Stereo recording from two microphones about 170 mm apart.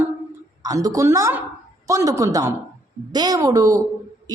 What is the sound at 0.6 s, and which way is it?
A woman's voice, 20° right (ahead or behind).